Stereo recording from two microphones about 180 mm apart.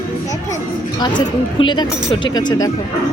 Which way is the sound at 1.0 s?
25° left (ahead or behind).